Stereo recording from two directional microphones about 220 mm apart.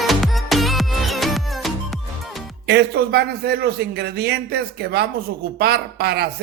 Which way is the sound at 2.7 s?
50° right (ahead or behind).